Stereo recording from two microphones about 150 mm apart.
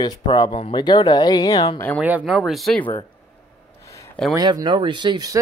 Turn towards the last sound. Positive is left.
turn(degrees=-25)  # may be behind; listen again after turning